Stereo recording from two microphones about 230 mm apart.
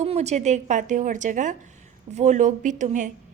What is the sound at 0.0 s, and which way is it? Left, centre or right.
A woman's voice, right.